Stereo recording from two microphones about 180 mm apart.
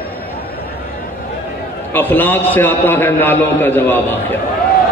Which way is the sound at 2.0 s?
10° left (ahead or behind).